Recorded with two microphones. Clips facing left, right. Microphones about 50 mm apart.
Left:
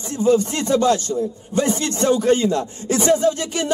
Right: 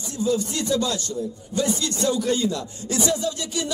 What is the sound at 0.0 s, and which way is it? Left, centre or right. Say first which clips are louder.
Speech: left 7 dB; left.